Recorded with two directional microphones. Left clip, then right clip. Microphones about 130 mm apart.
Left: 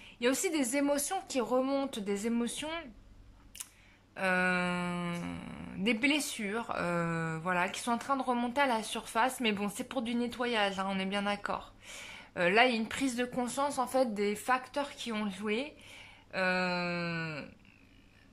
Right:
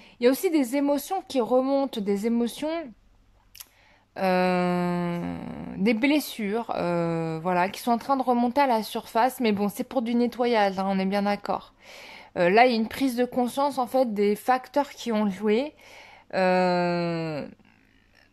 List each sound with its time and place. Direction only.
0.0 s speech: 35° right (ahead or behind)
4.1 s speech: 45° right (ahead or behind); by 17.5 s 60° right (ahead or behind)